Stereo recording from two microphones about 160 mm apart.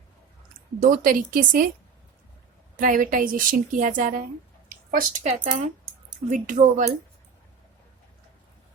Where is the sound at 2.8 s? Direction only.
55° right (ahead or behind).